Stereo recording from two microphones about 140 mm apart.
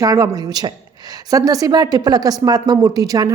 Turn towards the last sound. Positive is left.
turn(degrees=-25)  # may be behind; listen again after turning